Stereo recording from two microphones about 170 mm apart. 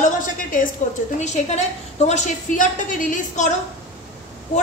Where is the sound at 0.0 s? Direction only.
50° left (ahead or behind).